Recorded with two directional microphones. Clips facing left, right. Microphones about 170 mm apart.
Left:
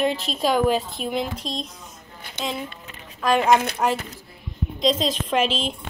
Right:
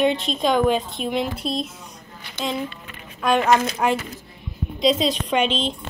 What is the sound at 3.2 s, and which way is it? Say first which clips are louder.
A woman's voice: even; centre (ahead or behind).